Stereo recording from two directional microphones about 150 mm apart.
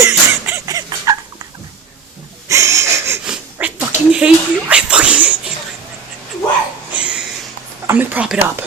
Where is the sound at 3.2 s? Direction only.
10° right (ahead or behind).